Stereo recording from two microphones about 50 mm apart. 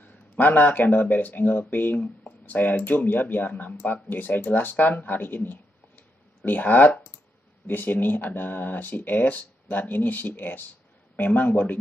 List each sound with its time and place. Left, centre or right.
0.0 s speech: left